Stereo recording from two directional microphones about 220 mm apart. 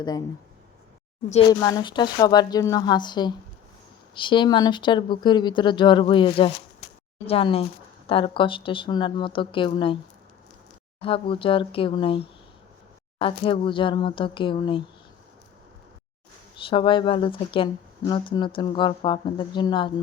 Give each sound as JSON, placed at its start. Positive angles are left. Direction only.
{"t": 1.5, "sound": "speech", "side_deg": 15}
{"t": 11.0, "sound": "speech", "side_deg": 25}
{"t": 16.6, "sound": "speech", "side_deg": 20}